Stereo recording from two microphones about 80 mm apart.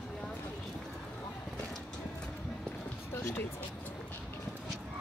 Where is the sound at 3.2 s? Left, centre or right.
Left.